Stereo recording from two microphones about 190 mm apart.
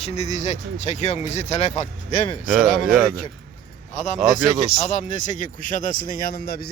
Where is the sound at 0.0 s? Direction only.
35° left (ahead or behind).